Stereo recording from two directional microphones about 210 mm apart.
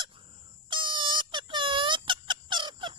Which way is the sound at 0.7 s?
20° right (ahead or behind).